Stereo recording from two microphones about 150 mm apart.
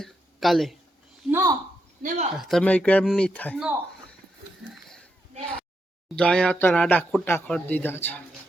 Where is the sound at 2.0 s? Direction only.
45° right (ahead or behind).